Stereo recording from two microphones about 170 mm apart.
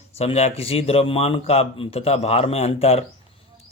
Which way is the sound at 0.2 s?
35° left (ahead or behind).